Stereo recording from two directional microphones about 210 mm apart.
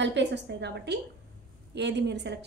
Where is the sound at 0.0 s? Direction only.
55° right (ahead or behind).